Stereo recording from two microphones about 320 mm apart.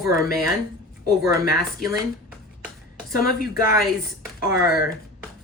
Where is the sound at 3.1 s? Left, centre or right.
Left.